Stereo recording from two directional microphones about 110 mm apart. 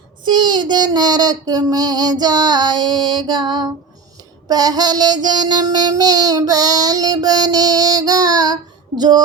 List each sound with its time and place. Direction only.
0.3 s child singing: 40° right (ahead or behind)